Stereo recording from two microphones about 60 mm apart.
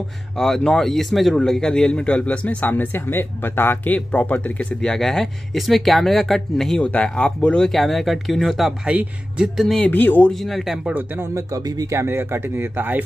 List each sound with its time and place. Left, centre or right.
0.4 s a man's voice: centre; by 4.7 s left
4.8 s speech: centre
6.8 s a man's voice: left
7.7 s speech: centre
8.8 s speech: centre
9.8 s a man's voice: left
10.3 s speech: centre
11.3 s speech: right
11.9 s speech: right